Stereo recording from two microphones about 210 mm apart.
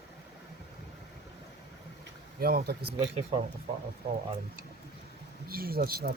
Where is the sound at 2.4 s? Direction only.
45° right (ahead or behind).